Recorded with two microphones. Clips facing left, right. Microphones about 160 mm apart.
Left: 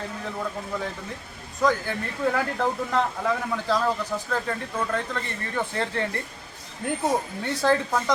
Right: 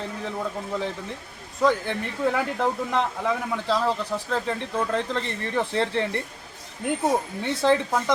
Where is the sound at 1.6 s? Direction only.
20° right (ahead or behind).